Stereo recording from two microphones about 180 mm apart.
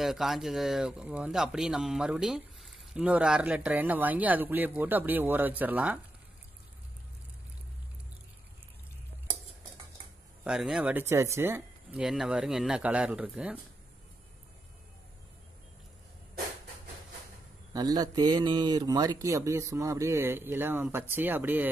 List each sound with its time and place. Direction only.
0.0 s speech: centre (ahead or behind)
10.4 s speech: 5° right (ahead or behind)
17.7 s speech: 20° right (ahead or behind)